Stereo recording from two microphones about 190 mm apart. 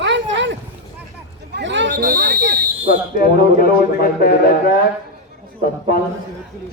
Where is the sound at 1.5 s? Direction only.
70° right (ahead or behind).